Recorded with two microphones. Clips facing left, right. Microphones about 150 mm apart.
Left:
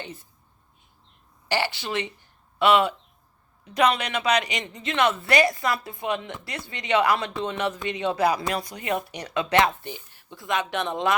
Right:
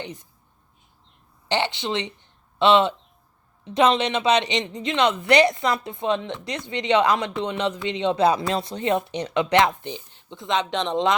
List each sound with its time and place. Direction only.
0.0 s a woman's voice: 20° right (ahead or behind)
1.5 s speech: 20° right (ahead or behind)